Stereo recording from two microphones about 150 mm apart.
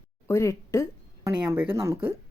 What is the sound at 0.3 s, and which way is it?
Speech, 20° left (ahead or behind).